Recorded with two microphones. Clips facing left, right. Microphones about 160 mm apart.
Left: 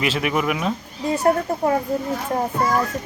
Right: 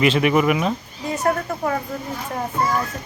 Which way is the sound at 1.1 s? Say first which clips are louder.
Left 3 dB; 30° left (ahead or behind).